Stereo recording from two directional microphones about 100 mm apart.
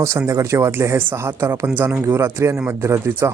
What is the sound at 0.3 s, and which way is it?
Speech, 30° right (ahead or behind).